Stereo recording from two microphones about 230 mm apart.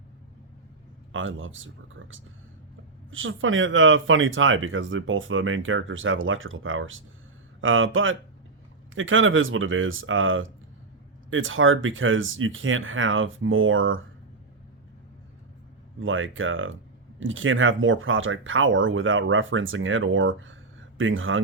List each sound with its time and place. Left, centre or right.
1.1 s speech: right
16.0 s speech: right